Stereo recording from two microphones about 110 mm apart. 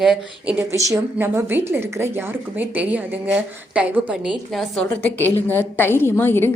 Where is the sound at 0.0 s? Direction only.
5° right (ahead or behind).